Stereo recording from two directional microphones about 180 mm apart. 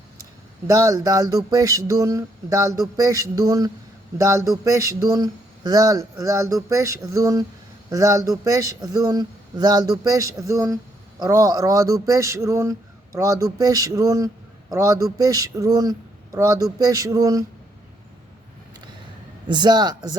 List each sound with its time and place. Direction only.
0.7 s a man's voice: 20° right (ahead or behind)
19.5 s a man's voice: 25° right (ahead or behind)